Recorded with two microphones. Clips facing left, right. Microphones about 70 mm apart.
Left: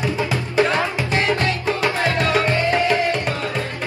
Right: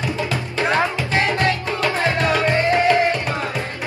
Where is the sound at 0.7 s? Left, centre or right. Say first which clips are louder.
Right 1 dB; right.